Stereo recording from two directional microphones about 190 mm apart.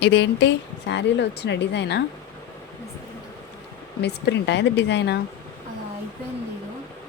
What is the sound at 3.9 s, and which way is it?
A woman's voice, 60° left (ahead or behind).